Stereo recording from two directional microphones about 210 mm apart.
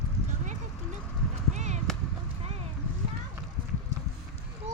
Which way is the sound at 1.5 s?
35° right (ahead or behind).